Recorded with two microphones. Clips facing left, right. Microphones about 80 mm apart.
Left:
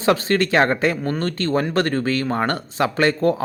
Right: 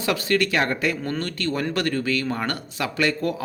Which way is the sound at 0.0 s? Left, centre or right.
Left.